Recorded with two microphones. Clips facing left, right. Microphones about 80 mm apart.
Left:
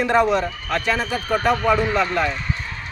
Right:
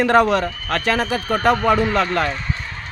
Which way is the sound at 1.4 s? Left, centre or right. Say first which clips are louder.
Right 3 dB; right.